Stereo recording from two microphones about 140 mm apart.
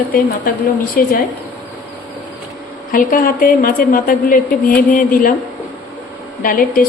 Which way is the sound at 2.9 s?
80° left.